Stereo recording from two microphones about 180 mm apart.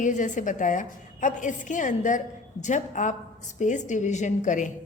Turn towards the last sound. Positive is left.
turn(degrees=45)  # may be behind; listen again after turning